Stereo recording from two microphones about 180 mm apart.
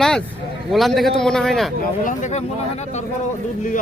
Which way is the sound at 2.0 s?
40° left (ahead or behind).